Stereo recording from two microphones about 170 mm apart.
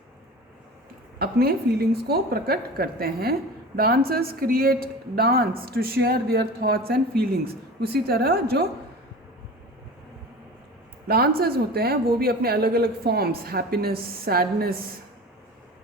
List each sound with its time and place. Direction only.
1.2 s speech: 65° right (ahead or behind)
11.3 s speech: 65° right (ahead or behind)